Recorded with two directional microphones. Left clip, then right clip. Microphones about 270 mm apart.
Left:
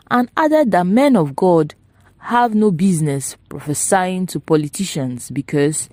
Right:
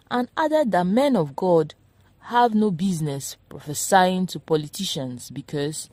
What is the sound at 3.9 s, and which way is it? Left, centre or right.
Speech, left.